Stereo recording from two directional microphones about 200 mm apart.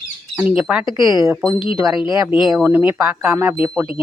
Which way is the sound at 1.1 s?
15° right (ahead or behind).